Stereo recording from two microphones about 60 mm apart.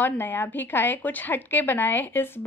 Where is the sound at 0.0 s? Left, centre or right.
Left.